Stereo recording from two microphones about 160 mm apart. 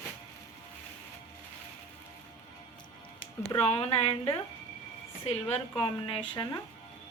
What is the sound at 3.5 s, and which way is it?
Speech, 40° left (ahead or behind).